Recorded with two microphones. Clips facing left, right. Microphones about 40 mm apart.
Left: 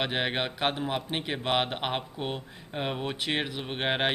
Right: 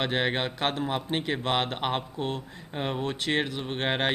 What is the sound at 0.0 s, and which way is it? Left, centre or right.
Speech, centre.